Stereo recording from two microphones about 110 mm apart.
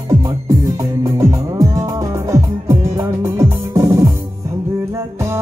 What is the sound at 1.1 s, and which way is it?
Music, 30° right (ahead or behind).